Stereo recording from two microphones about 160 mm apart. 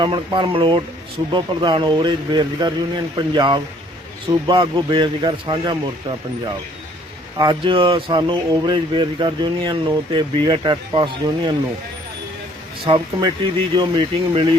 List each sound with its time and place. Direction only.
0.0 s speech: 30° right (ahead or behind)
13.7 s speech: 30° right (ahead or behind)